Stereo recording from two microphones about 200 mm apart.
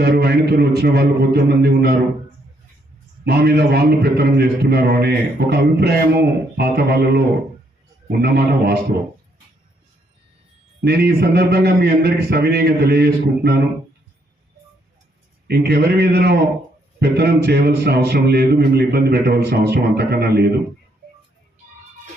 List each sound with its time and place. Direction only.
0.0 s a man's voice: 55° right (ahead or behind)
3.2 s a man's voice: 55° right (ahead or behind)
8.2 s a man's voice: 55° right (ahead or behind)
10.8 s a man's voice: 55° right (ahead or behind)
15.4 s a man's voice: 50° right (ahead or behind)